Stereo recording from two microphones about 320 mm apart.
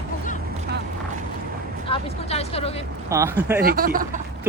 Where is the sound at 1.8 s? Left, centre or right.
Centre.